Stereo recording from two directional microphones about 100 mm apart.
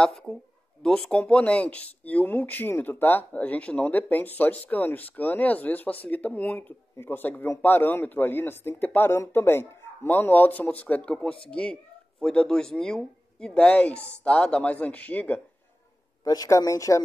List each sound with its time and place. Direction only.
0.8 s speech: 10° left (ahead or behind)
16.3 s speech: 35° left (ahead or behind)